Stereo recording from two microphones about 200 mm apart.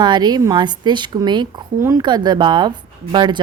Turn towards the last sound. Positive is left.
turn(degrees=-20)  # may be behind; listen again after turning